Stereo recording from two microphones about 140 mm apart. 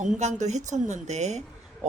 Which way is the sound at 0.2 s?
55° right (ahead or behind).